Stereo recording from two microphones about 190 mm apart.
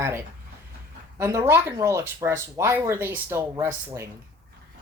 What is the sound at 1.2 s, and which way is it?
Speech, 15° right (ahead or behind).